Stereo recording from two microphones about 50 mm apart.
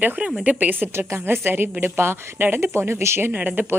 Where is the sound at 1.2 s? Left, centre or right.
Right.